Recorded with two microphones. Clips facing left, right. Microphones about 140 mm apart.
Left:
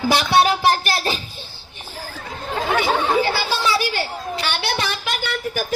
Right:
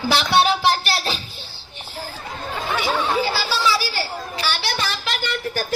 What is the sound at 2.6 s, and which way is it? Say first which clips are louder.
Chatter: left 3 dB; 55° left (ahead or behind).